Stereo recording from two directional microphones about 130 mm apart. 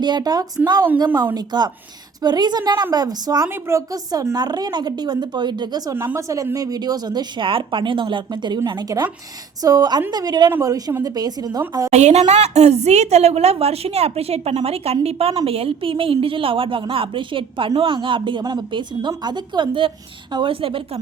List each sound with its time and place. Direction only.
0.0 s a woman's voice: 35° right (ahead or behind)
11.9 s a woman's voice: 60° right (ahead or behind); by 21.0 s 45° right (ahead or behind)